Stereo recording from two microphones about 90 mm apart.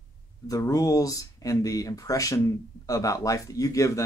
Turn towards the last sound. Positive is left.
turn(degrees=40)  # may be behind; listen again after turning